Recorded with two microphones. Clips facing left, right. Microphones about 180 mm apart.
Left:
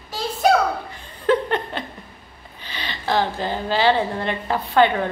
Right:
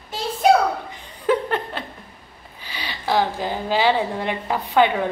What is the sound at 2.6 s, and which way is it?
A woman's voice, 10° right (ahead or behind).